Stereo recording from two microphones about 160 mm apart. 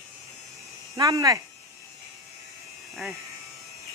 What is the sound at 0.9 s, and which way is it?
Speech, 20° right (ahead or behind).